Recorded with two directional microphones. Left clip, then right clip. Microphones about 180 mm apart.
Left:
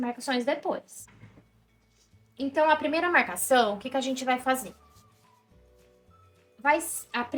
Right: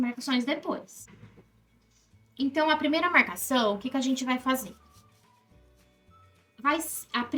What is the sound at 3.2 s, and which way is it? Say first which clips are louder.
Speech: left 4 dB; 25° left (ahead or behind).